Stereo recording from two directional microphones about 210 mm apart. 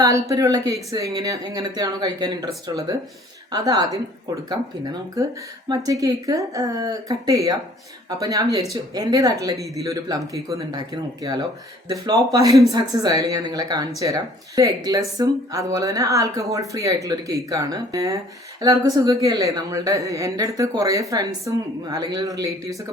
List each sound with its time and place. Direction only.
0.0 s speech: 15° right (ahead or behind)